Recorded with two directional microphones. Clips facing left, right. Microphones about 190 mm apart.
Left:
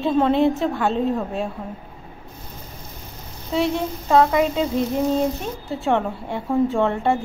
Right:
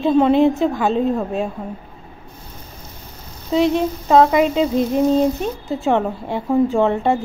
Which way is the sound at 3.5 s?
20° right (ahead or behind).